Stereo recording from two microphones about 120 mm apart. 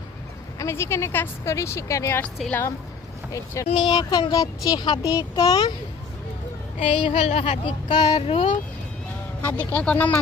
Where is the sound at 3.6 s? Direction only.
45° left (ahead or behind).